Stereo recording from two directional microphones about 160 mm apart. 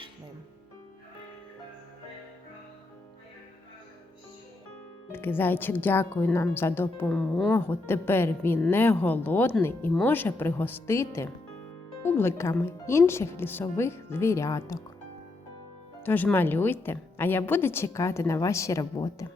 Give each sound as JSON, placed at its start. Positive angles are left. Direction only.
{"t": 5.1, "sound": "speech", "side_deg": 15}
{"t": 16.0, "sound": "speech", "side_deg": 10}